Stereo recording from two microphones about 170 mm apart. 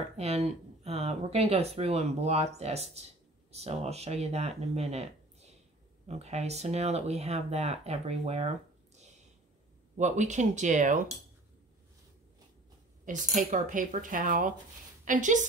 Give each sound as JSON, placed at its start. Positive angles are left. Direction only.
{"t": 0.2, "sound": "speech", "side_deg": -40}
{"t": 13.0, "sound": "speech", "side_deg": -50}